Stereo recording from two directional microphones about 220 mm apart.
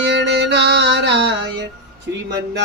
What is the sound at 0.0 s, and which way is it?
Music, 50° right (ahead or behind).